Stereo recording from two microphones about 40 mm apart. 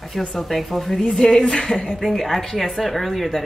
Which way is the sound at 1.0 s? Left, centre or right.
Centre.